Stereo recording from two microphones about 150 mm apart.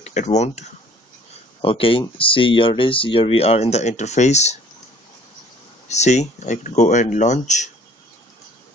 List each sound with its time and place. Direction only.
0.0 s speech: 50° left (ahead or behind)
1.6 s speech: 35° left (ahead or behind)
5.9 s speech: 50° left (ahead or behind)